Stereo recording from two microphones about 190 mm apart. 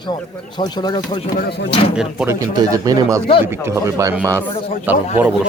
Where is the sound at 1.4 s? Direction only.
60° left (ahead or behind).